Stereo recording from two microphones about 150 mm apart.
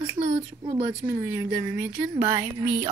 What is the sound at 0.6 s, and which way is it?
A woman's voice, 20° right (ahead or behind).